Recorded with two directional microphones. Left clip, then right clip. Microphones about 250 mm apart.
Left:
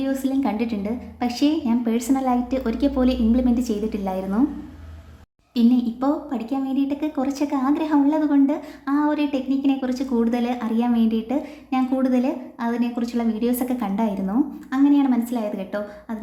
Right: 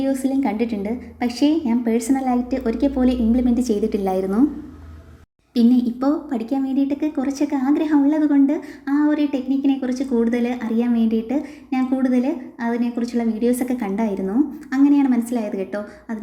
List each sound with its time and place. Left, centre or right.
0.0 s a woman's voice: centre
5.5 s a woman's voice: centre